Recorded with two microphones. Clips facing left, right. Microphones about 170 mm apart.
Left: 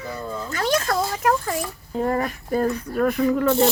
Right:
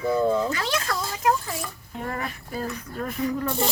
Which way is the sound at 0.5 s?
45° left (ahead or behind).